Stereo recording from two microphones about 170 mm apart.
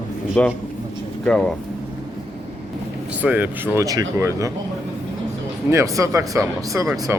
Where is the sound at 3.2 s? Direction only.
10° right (ahead or behind).